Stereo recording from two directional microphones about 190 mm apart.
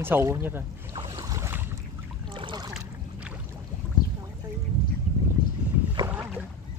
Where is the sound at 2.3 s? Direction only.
25° right (ahead or behind).